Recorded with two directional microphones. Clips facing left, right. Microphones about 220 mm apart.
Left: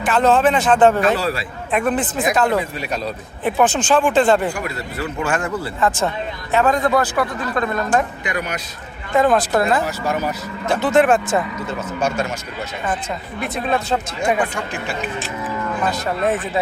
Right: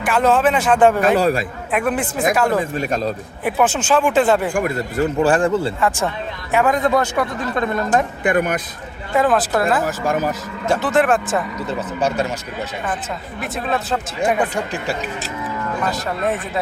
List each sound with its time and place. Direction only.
0.0 s a man's voice: 10° right (ahead or behind)
2.7 s speech: 45° right (ahead or behind)
3.4 s a man's voice: 5° right (ahead or behind)
4.5 s a man's voice: 50° right (ahead or behind); by 5.7 s 30° right (ahead or behind)
5.8 s a man's voice: 15° right (ahead or behind)
8.2 s speech: 50° right (ahead or behind)
9.1 s speech: 5° right (ahead or behind)
9.8 s speech: 45° right (ahead or behind)
10.8 s speech: centre (ahead or behind)
11.8 s a man's voice: 35° right (ahead or behind)
13.4 s speech: centre (ahead or behind)
14.5 s a man's voice: 40° right (ahead or behind)
15.9 s speech: centre (ahead or behind)